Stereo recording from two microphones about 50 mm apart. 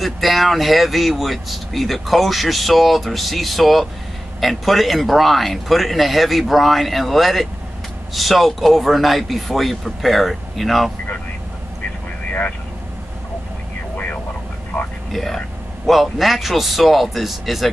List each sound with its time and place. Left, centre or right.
0.0 s speech: centre
12.3 s vehicle: left
15.1 s speech: centre